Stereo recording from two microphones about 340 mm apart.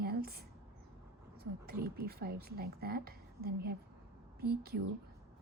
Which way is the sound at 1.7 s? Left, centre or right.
Right.